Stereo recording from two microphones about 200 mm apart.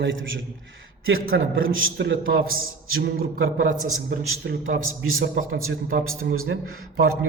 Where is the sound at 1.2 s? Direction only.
90° right; by 4.6 s 50° right (ahead or behind).